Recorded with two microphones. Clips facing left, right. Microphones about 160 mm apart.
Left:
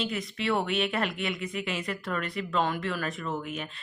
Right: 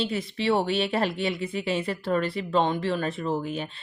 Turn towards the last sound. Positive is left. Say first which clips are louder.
# right 5 dB
turn(degrees=-30)  # may be behind; listen again after turning